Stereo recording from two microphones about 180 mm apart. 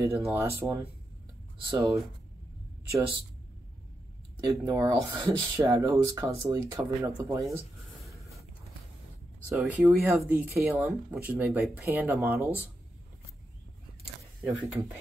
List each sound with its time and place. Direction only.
0.0 s speech: 15° right (ahead or behind)
4.4 s speech: 20° right (ahead or behind)
9.5 s speech: 5° right (ahead or behind)
14.4 s speech: 10° right (ahead or behind)